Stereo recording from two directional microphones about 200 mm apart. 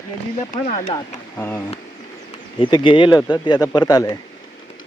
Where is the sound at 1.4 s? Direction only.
10° left (ahead or behind).